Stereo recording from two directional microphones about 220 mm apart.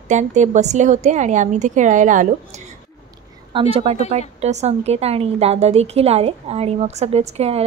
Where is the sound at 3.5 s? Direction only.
25° right (ahead or behind).